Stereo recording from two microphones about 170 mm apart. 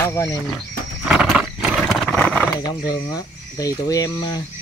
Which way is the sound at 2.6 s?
20° left (ahead or behind).